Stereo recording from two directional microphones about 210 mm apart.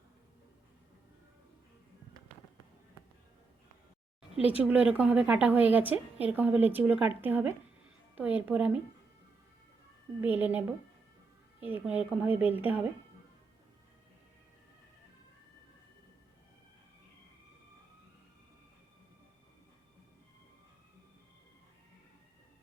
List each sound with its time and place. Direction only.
4.4 s speech: 25° left (ahead or behind)
4.6 s a woman's voice: 5° right (ahead or behind)
10.2 s a woman's voice: 10° right (ahead or behind)
11.6 s a woman's voice: 5° right (ahead or behind)